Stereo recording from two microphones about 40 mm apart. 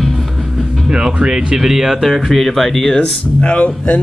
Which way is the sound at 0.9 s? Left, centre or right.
Centre.